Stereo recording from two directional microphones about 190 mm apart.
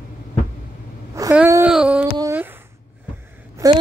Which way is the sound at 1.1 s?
10° right (ahead or behind).